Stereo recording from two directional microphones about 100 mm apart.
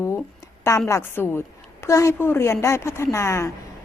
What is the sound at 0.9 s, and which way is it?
A woman's voice, 25° left (ahead or behind).